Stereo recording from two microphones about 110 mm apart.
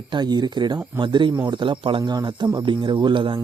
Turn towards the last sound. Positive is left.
turn(degrees=-45)  # may be behind; listen again after turning